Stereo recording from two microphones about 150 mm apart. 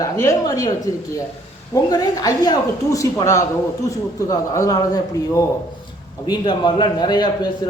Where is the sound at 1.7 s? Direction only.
25° left (ahead or behind).